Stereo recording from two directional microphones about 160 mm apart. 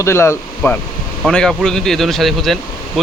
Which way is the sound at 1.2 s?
5° left (ahead or behind).